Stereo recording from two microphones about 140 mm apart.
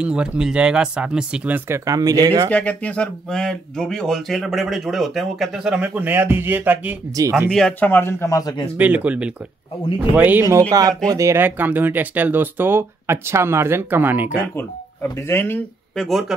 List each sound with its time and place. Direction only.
0.0 s speech: 5° right (ahead or behind)
1.9 s speech: 25° right (ahead or behind)
2.5 s speech: 10° left (ahead or behind); by 7.5 s 20° right (ahead or behind)
7.5 s speech: 10° left (ahead or behind); by 8.6 s 25° left (ahead or behind)
8.7 s speech: 10° right (ahead or behind)
10.7 s speech: 25° right (ahead or behind)
14.5 s speech: 15° left (ahead or behind)
16.0 s speech: centre (ahead or behind)